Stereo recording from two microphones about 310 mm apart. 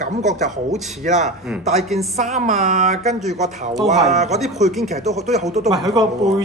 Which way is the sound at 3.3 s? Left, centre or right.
Right.